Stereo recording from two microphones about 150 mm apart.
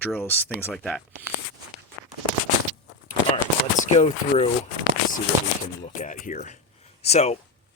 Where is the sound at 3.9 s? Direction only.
45° left (ahead or behind).